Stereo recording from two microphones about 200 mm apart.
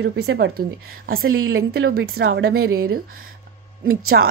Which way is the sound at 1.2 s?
90° right.